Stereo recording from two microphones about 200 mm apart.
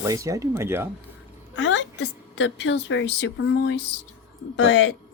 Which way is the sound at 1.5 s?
65° left (ahead or behind).